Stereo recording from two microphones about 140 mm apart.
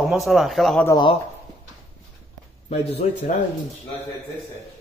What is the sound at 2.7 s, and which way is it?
Speech, 45° left (ahead or behind).